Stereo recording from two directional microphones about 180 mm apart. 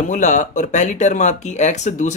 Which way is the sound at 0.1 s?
45° left (ahead or behind).